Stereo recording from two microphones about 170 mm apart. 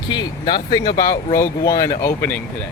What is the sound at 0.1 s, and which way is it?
Speech, 25° left (ahead or behind).